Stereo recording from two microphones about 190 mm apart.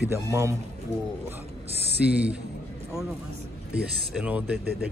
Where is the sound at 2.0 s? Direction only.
5° right (ahead or behind).